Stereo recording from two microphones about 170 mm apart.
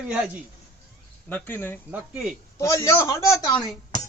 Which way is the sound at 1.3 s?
10° left (ahead or behind).